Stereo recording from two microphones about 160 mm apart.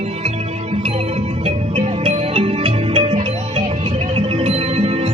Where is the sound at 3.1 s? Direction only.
50° right (ahead or behind).